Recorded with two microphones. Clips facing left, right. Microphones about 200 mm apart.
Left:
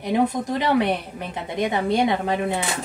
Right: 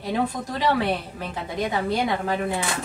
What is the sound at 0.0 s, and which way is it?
A woman's voice, 20° left (ahead or behind).